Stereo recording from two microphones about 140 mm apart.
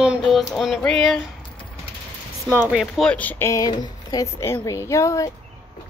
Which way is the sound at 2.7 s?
5° left (ahead or behind).